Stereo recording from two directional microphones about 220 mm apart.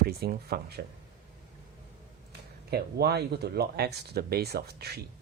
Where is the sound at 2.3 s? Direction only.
45° right (ahead or behind).